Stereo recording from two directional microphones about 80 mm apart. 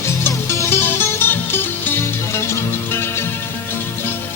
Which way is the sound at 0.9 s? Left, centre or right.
Left.